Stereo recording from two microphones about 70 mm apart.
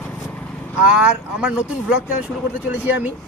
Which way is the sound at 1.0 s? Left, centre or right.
Centre.